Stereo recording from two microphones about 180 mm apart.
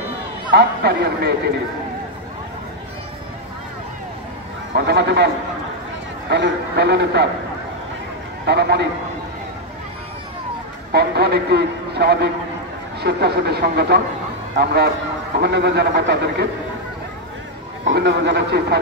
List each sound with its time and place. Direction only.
0.5 s speech: 65° right (ahead or behind)
4.7 s a man's voice: 65° right (ahead or behind)
6.3 s a man's voice: 70° right (ahead or behind)
8.5 s a man's voice: 65° right (ahead or behind)
10.9 s a man's voice: 65° right (ahead or behind)
17.9 s a man's voice: 70° right (ahead or behind)